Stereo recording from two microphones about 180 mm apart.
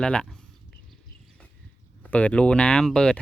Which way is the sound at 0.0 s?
5° left (ahead or behind).